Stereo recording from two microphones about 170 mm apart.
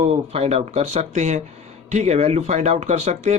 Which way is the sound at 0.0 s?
40° right (ahead or behind).